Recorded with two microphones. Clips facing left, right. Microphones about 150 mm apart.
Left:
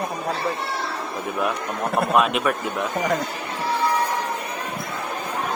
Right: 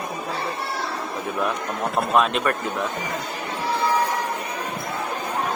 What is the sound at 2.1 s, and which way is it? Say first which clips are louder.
Speech: even; 5° left (ahead or behind).